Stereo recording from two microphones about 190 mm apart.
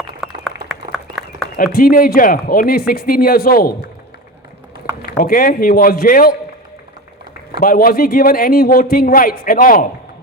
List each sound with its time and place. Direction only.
0.2 s a sound: centre (ahead or behind)
1.5 s speech: 50° left (ahead or behind)
5.1 s speech: 50° left (ahead or behind)
7.6 s speech: 50° left (ahead or behind)